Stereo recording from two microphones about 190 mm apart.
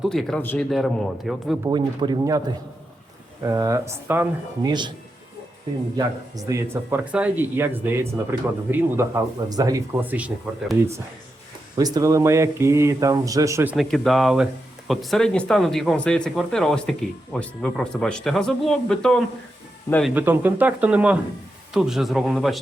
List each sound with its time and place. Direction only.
0.0 s speech: centre (ahead or behind)
1.6 s speech: 20° right (ahead or behind)
3.4 s speech: 20° right (ahead or behind)
6.0 s speech: 20° right (ahead or behind)
11.8 s speech: 20° right (ahead or behind)
13.7 s speech: centre (ahead or behind)
20.1 s speech: 10° right (ahead or behind)